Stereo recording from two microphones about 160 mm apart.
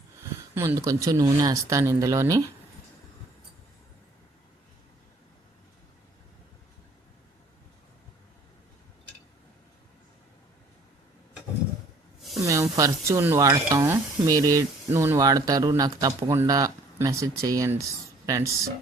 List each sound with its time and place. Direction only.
0.5 s speech: 15° right (ahead or behind)
12.7 s speech: 20° right (ahead or behind)